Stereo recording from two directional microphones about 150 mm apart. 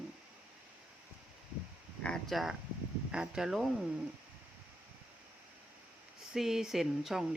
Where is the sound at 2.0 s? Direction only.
5° left (ahead or behind).